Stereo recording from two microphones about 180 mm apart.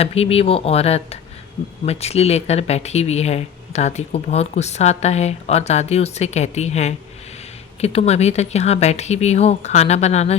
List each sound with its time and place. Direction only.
0.0 s speech: 35° left (ahead or behind)